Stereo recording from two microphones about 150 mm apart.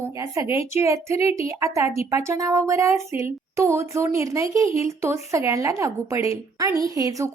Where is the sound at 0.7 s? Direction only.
20° right (ahead or behind).